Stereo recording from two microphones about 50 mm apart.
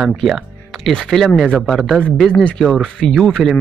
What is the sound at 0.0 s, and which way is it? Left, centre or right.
Speech, centre.